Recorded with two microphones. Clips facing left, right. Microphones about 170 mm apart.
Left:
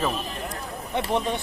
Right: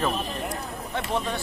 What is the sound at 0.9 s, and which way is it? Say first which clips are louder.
Speech: left 3 dB; 20° left (ahead or behind).